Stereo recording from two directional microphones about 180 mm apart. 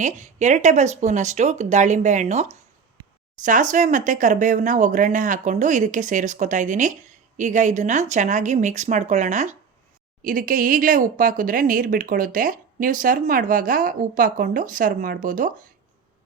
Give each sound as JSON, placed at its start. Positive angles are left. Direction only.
{"t": 0.0, "sound": "speech", "side_deg": -40}